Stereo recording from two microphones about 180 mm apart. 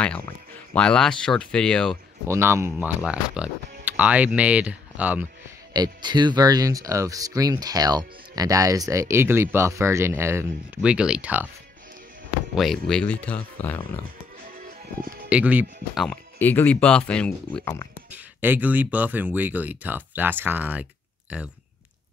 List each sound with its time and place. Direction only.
0.0 s speech: 5° left (ahead or behind)
2.2 s speech: 15° right (ahead or behind)
5.7 s speech: 25° right (ahead or behind)
12.5 s speech: centre (ahead or behind)
15.2 s speech: 5° right (ahead or behind)
16.3 s speech: 10° left (ahead or behind)
18.1 s speech: 10° right (ahead or behind)